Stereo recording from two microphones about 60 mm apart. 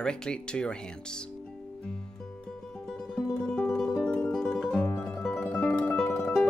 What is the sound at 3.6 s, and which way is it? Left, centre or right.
Music, centre.